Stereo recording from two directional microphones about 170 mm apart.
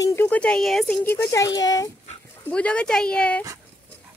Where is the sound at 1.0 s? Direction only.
15° left (ahead or behind).